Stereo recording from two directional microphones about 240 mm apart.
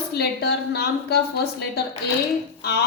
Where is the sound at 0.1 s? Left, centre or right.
Left.